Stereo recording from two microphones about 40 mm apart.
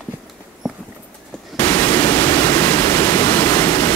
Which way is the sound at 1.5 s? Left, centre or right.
Left.